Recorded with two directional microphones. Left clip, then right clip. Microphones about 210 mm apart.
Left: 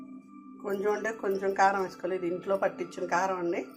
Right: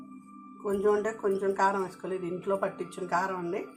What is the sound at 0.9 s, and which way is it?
Speech, 25° left (ahead or behind).